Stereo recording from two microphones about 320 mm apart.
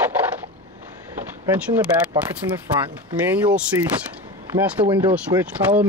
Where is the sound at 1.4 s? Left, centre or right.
Centre.